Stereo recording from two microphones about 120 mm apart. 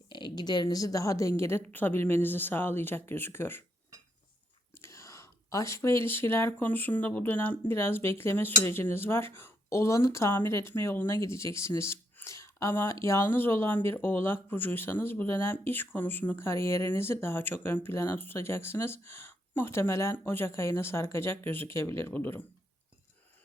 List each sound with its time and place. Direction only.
0.1 s speech: 40° left (ahead or behind); by 3.6 s 20° left (ahead or behind)
4.8 s speech: 25° left (ahead or behind)